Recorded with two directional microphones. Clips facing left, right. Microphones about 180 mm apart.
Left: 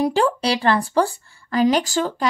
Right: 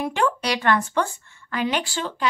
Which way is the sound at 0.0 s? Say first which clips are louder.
Left 5 dB; 35° left (ahead or behind).